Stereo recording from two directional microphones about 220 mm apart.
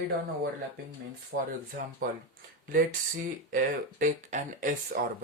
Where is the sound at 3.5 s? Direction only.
35° right (ahead or behind).